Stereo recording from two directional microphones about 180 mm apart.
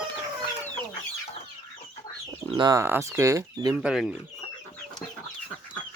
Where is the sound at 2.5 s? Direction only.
20° right (ahead or behind).